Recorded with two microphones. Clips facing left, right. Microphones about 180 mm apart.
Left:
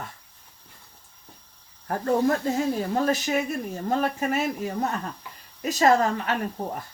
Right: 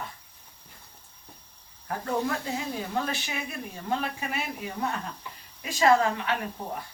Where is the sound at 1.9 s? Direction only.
45° left (ahead or behind).